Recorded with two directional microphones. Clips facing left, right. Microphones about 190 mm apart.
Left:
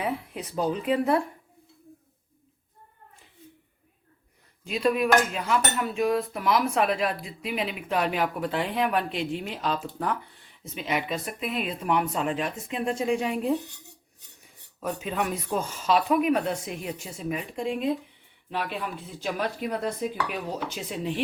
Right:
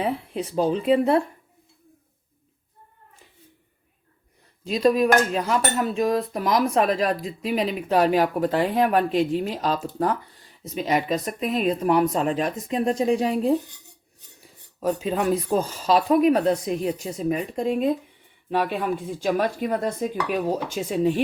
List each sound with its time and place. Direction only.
0.0 s speech: 30° right (ahead or behind)
4.6 s cutlery: 35° right (ahead or behind)
18.5 s speech: 50° right (ahead or behind)